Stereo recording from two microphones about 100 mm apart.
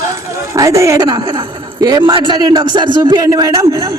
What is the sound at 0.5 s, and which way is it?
A man's voice, 30° right (ahead or behind).